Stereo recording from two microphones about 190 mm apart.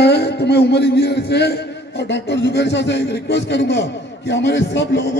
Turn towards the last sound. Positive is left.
turn(degrees=65)  # may be behind; listen again after turning